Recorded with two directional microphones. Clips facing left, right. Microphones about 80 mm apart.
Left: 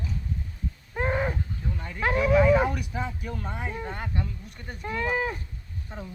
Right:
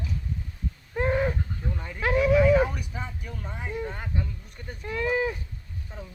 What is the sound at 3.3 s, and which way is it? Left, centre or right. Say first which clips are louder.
Speech: left 2 dB; left.